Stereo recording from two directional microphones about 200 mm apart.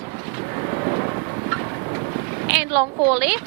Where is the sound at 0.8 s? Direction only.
25° right (ahead or behind).